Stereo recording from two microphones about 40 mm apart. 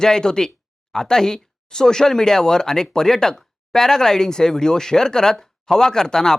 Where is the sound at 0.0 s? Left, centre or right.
Centre.